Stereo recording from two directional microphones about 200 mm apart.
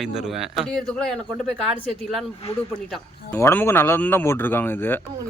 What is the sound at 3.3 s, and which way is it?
Speech, 15° left (ahead or behind).